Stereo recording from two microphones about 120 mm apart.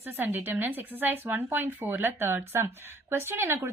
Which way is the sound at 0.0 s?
20° right (ahead or behind).